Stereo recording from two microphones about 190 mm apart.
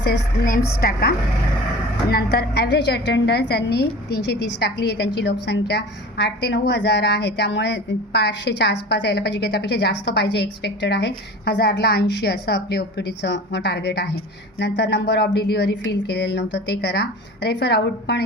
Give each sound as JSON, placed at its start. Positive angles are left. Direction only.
{"t": 0.1, "sound": "a woman's voice", "side_deg": 55}